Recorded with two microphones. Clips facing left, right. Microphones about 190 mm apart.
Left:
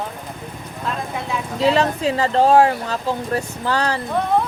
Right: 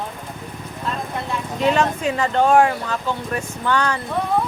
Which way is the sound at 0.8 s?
Centre (ahead or behind).